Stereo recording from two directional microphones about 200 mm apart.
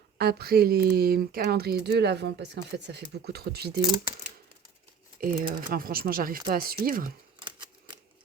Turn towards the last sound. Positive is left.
turn(degrees=-45)  # may be behind; listen again after turning